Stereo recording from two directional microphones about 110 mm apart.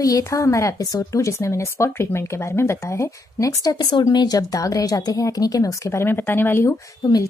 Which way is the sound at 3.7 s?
40° left (ahead or behind).